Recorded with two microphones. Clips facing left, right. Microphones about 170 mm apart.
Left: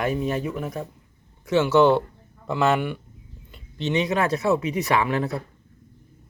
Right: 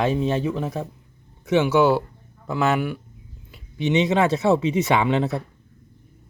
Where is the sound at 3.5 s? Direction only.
10° right (ahead or behind).